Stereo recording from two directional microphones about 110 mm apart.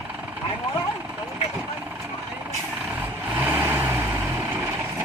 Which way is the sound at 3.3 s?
15° right (ahead or behind).